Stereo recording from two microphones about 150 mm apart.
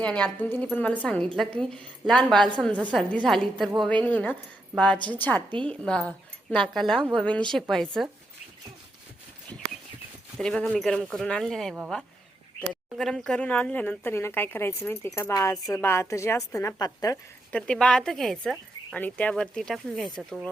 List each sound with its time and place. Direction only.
0.0 s speech: 10° left (ahead or behind)
10.3 s a woman's voice: 5° left (ahead or behind); by 17.2 s 25° left (ahead or behind)
17.5 s speech: 5° left (ahead or behind)